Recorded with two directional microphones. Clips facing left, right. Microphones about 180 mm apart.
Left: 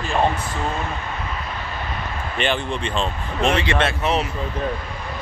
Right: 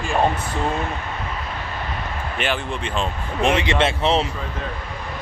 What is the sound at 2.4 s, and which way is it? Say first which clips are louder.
Speech: left 2 dB; 5° right (ahead or behind).